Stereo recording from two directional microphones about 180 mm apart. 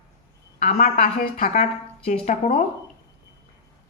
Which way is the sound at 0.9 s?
55° left (ahead or behind).